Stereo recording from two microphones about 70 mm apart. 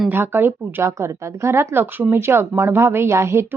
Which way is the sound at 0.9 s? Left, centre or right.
Right.